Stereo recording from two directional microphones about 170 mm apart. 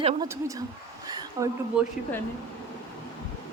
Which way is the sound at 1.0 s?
20° right (ahead or behind).